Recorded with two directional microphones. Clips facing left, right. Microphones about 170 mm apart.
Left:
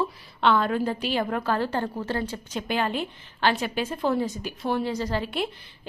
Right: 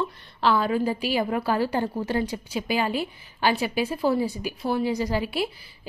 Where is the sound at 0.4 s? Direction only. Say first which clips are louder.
Even; 5° right (ahead or behind).